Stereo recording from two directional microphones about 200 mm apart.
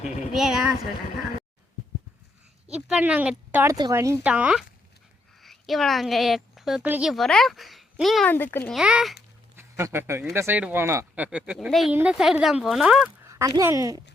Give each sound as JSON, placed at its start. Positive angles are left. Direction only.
{"t": 0.0, "sound": "speech", "side_deg": -5}
{"t": 2.7, "sound": "a woman's voice", "side_deg": -5}
{"t": 8.8, "sound": "a man's voice", "side_deg": -5}
{"t": 13.2, "sound": "speech", "side_deg": -15}